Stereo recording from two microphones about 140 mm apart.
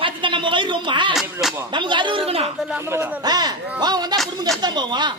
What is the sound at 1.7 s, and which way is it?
Speech, 35° right (ahead or behind).